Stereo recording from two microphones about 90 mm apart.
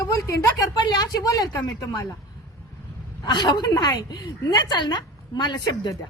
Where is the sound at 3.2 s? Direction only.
55° left (ahead or behind).